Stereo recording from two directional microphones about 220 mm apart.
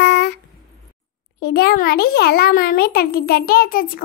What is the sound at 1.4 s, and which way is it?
A child's voice, 45° left (ahead or behind).